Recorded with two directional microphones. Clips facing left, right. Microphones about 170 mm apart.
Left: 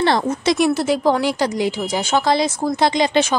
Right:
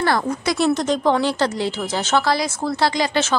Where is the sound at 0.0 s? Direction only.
25° left (ahead or behind).